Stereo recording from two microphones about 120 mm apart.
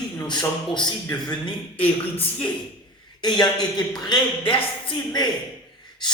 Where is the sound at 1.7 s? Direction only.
55° left (ahead or behind).